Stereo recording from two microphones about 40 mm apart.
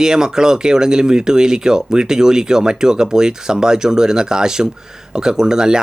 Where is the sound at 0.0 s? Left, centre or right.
Centre.